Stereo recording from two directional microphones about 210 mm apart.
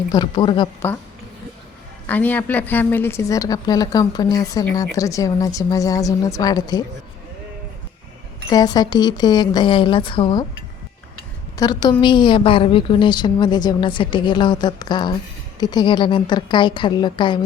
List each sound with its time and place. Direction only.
0.1 s a woman's voice: 20° left (ahead or behind)
2.0 s a woman's voice: 10° left (ahead or behind)
8.4 s a woman's voice: 20° left (ahead or behind)
11.5 s a woman's voice: 20° left (ahead or behind)